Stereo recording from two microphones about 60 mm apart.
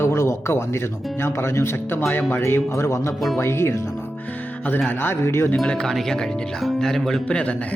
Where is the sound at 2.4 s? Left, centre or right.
Left.